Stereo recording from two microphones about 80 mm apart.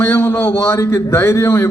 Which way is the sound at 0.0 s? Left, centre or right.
Left.